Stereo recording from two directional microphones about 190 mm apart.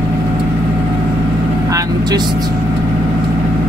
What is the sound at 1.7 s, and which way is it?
Vehicle, 20° right (ahead or behind).